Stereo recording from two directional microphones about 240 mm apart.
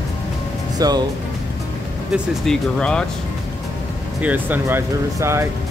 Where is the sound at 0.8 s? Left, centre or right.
Centre.